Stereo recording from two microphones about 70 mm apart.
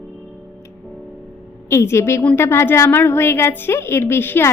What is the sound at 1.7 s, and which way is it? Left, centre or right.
Speech, left.